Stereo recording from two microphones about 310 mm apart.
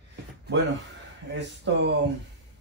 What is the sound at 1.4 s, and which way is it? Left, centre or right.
Speech, right.